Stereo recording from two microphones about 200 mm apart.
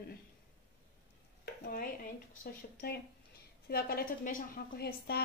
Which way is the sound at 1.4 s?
45° left (ahead or behind).